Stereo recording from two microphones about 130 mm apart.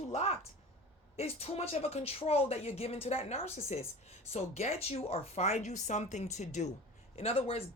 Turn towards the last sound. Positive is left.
turn(degrees=50)  # may be behind; listen again after turning